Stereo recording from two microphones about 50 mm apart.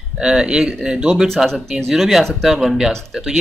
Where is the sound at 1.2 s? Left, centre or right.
Centre.